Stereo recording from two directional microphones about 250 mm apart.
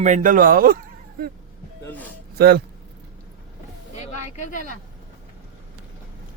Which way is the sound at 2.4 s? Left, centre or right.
Right.